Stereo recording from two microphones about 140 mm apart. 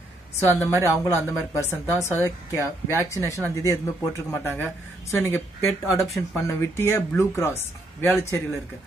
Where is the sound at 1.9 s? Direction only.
15° left (ahead or behind).